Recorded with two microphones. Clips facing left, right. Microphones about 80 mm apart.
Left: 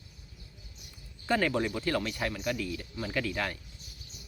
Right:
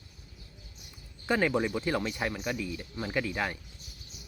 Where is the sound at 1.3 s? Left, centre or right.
Centre.